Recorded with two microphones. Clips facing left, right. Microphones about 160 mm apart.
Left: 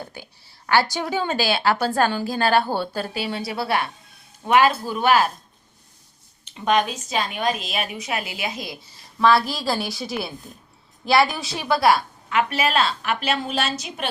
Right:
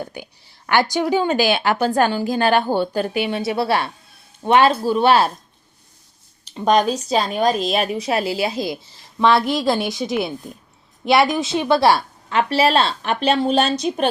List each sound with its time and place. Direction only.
0.7 s a woman's voice: 15° right (ahead or behind); by 5.3 s 35° right (ahead or behind)
6.4 s a woman's voice: 35° right (ahead or behind)
9.6 s a woman's voice: centre (ahead or behind)
9.9 s a woman's voice: 20° right (ahead or behind); by 14.1 s 35° right (ahead or behind)